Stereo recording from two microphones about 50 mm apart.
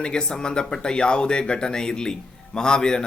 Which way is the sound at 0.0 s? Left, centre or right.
Centre.